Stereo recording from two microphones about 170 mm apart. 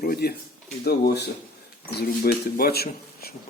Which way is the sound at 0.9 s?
70° left (ahead or behind).